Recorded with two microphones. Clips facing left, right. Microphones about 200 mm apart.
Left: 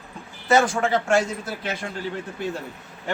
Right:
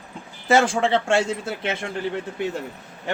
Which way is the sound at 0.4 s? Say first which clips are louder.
Right 1 dB; 25° right (ahead or behind).